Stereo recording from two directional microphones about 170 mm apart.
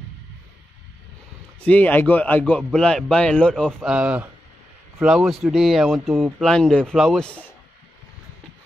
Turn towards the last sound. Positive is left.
turn(degrees=5)  # may be behind; listen again after turning